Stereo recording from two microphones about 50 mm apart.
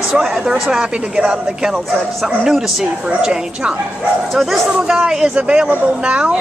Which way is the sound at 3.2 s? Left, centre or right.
Centre.